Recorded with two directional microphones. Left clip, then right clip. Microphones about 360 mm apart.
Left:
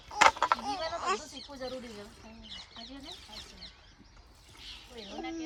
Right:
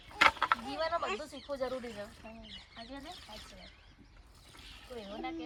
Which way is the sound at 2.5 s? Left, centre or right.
Centre.